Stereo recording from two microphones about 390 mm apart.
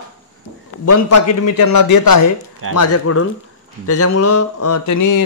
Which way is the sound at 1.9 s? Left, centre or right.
Left.